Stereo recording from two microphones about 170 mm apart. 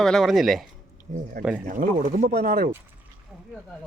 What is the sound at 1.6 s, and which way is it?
Speech, 55° right (ahead or behind).